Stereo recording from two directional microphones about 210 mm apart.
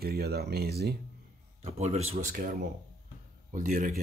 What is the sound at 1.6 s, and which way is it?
Speech, 30° right (ahead or behind).